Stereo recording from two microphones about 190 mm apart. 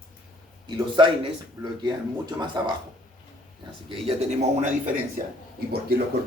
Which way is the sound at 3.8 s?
30° right (ahead or behind).